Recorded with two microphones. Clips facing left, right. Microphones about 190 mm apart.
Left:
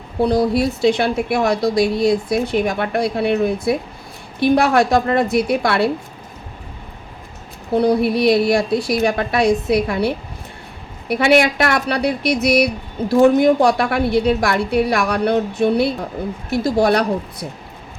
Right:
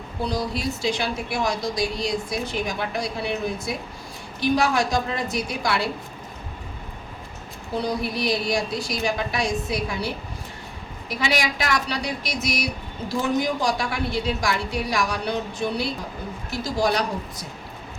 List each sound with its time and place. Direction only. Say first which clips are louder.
0.2 s speech: left 11 dB; 60° left (ahead or behind)
7.7 s speech: left 11 dB; 60° left (ahead or behind)
11.1 s speech: left 11 dB; 60° left (ahead or behind)